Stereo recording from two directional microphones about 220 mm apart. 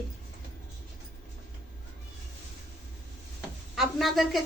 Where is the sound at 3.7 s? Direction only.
Centre (ahead or behind).